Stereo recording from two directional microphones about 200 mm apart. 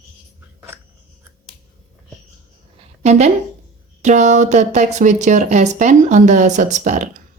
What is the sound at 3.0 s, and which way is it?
A woman's voice, 35° right (ahead or behind).